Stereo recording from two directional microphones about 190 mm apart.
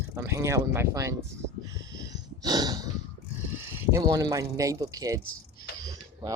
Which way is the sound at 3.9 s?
20° right (ahead or behind).